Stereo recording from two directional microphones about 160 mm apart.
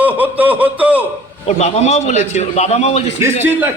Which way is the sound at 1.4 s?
45° left (ahead or behind).